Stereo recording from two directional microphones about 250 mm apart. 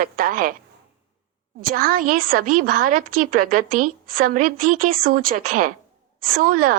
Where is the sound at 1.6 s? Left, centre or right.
Right.